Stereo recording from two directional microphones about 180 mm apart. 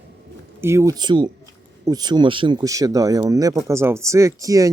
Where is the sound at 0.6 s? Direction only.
15° right (ahead or behind).